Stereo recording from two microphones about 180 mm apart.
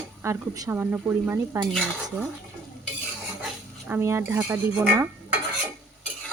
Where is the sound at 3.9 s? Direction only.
15° right (ahead or behind).